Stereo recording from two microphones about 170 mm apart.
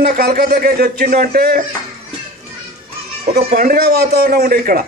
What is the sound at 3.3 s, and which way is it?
A man's voice, 55° right (ahead or behind).